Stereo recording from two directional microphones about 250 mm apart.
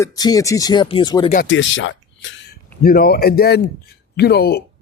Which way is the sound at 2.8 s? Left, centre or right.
Left.